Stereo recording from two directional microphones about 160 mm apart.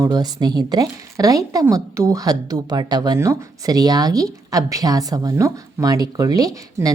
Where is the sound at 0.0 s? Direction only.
25° right (ahead or behind).